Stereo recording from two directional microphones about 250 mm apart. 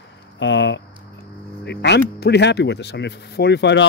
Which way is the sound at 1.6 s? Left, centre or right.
Left.